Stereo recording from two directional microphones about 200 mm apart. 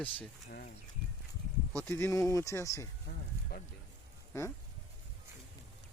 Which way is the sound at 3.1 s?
40° left (ahead or behind).